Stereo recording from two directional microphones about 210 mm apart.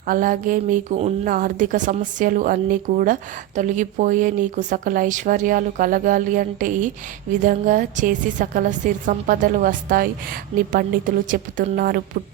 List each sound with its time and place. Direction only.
0.1 s speech: 40° right (ahead or behind)